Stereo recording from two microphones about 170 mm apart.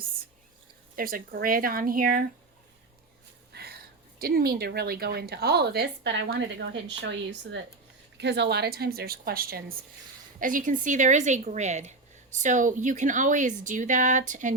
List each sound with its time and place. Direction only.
0.9 s a woman's voice: 60° right (ahead or behind)
3.5 s a sound: 70° right (ahead or behind)
4.2 s a woman's voice: 60° right (ahead or behind)
10.4 s a woman's voice: 50° right (ahead or behind)